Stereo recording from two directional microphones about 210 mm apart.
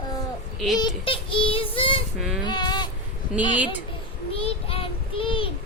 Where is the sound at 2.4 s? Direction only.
20° left (ahead or behind).